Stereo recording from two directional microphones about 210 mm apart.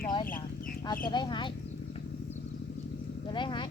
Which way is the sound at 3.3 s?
20° left (ahead or behind).